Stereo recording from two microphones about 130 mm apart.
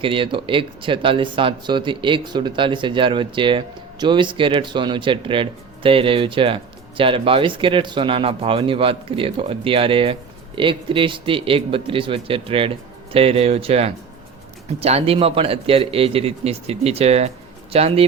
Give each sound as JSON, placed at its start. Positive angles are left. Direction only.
{"t": 0.0, "sound": "a man's voice", "side_deg": -40}